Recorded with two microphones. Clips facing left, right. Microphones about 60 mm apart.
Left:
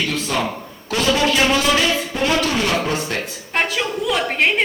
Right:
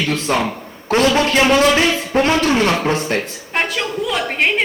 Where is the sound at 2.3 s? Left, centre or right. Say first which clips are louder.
Right 2 dB; right.